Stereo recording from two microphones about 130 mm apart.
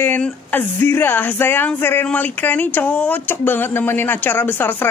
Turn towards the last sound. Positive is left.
turn(degrees=15)  # may be behind; listen again after turning